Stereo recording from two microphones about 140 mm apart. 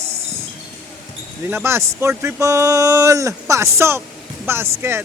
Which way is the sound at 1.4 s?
15° right (ahead or behind).